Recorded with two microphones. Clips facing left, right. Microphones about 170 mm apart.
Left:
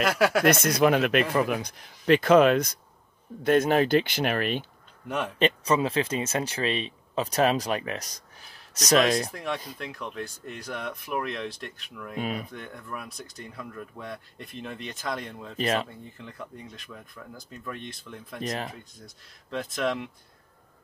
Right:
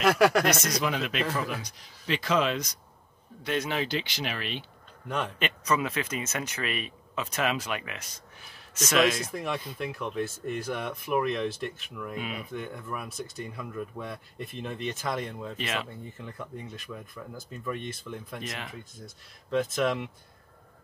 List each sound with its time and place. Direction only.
0.0 s speech: centre (ahead or behind)
0.5 s speech: 55° left (ahead or behind)
5.0 s speech: 10° left (ahead or behind)
5.4 s speech: 30° left (ahead or behind)
9.3 s speech: centre (ahead or behind)
12.2 s speech: 40° left (ahead or behind)
12.5 s speech: 5° right (ahead or behind)
15.5 s speech: 40° left (ahead or behind)
16.2 s speech: centre (ahead or behind)
18.4 s speech: 40° left (ahead or behind)
18.7 s speech: centre (ahead or behind)